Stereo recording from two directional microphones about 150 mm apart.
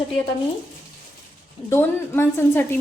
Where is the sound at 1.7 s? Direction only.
15° left (ahead or behind).